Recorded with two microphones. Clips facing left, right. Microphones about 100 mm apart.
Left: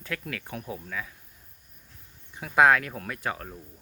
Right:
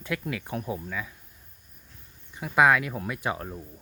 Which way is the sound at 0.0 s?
15° right (ahead or behind).